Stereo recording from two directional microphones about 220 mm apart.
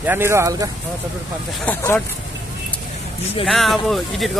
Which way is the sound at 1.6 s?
10° left (ahead or behind).